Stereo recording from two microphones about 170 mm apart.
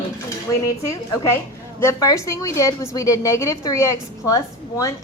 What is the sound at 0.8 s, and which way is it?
A woman's voice, 15° left (ahead or behind).